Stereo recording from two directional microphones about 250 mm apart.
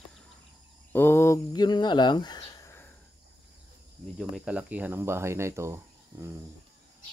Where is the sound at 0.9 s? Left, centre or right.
Centre.